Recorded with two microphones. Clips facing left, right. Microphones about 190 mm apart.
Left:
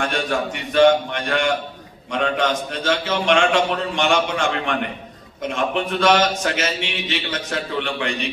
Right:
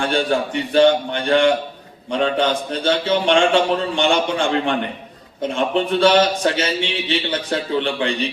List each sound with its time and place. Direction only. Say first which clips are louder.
0.0 s a man's voice: right 3 dB; 30° right (ahead or behind)